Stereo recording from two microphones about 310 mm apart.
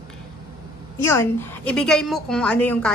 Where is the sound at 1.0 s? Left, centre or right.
Centre.